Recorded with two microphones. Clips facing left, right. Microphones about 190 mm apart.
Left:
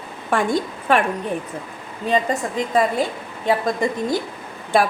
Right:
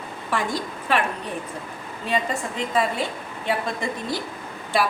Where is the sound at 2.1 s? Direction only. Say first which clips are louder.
Left 5 dB; 40° left (ahead or behind).